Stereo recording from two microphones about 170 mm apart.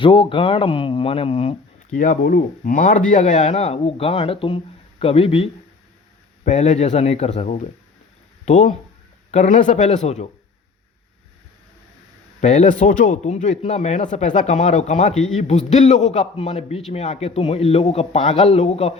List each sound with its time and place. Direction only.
0.0 s speech: 30° left (ahead or behind)
1.9 s speech: 50° left (ahead or behind)
12.4 s speech: 45° left (ahead or behind)